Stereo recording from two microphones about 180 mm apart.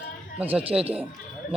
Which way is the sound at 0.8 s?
35° right (ahead or behind).